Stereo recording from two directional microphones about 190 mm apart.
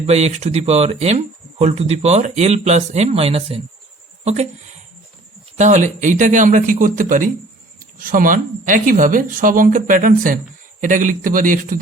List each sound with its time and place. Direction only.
0.0 s speech: 35° right (ahead or behind)
5.5 s speech: 40° right (ahead or behind)